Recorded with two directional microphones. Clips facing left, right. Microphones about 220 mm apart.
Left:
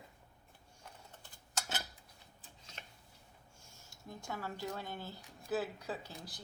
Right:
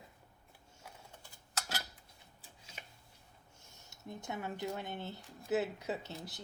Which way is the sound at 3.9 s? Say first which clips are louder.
Right 2 dB; 20° right (ahead or behind).